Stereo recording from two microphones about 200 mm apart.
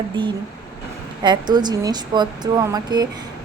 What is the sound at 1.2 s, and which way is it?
Speech, 20° right (ahead or behind).